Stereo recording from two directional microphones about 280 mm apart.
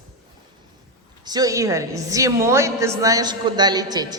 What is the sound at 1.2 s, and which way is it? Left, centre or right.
A woman's voice, centre.